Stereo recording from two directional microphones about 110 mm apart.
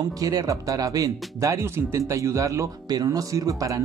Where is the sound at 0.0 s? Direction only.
35° right (ahead or behind).